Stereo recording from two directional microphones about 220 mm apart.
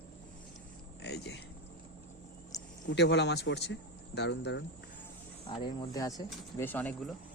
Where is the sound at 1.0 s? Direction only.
50° left (ahead or behind).